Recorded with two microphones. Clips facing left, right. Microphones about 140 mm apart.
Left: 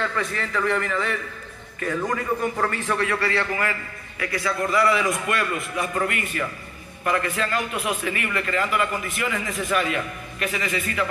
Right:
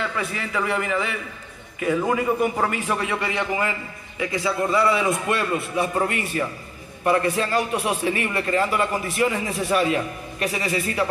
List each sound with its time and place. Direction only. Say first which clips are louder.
0.0 s a man's voice: left 1 dB; 5° right (ahead or behind); by 11.1 s 35° right (ahead or behind)